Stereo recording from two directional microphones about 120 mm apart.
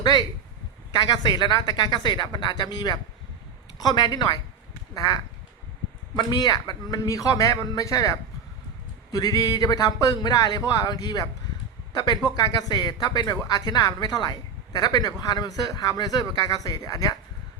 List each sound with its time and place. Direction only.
0.0 s a man's voice: 35° left (ahead or behind)